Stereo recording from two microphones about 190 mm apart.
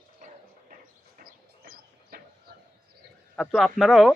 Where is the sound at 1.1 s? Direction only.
50° right (ahead or behind).